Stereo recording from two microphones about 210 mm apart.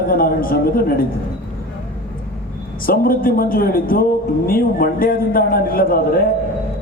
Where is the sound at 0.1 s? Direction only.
45° left (ahead or behind).